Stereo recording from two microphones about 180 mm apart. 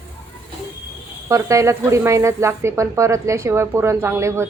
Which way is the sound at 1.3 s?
15° right (ahead or behind).